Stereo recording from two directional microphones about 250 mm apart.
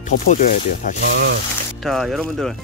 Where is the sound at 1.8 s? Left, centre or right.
Centre.